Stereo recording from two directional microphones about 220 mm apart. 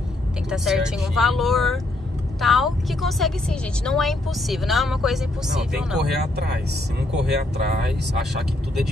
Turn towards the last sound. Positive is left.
turn(degrees=-45)  # may be behind; listen again after turning